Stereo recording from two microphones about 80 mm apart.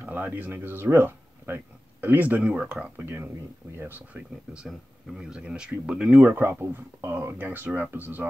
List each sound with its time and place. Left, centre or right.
0.0 s speech: right
5.1 s speech: centre
6.6 s speech: right